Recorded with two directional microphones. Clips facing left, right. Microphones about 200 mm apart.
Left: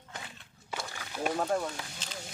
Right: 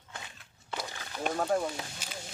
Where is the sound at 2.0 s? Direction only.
10° right (ahead or behind).